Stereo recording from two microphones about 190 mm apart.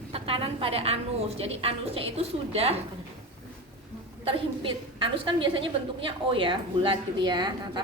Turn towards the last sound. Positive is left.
turn(degrees=-25)  # may be behind; listen again after turning